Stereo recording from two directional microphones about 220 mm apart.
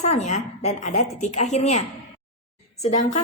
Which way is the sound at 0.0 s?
30° left (ahead or behind).